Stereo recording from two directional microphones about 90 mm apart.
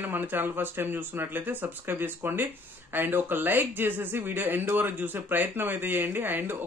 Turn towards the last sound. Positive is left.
turn(degrees=-20)  # may be behind; listen again after turning